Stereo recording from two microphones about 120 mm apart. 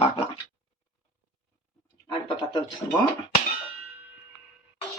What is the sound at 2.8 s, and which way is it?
Speech, 30° left (ahead or behind).